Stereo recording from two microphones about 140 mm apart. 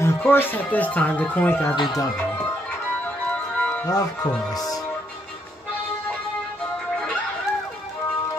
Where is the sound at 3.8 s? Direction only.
25° left (ahead or behind).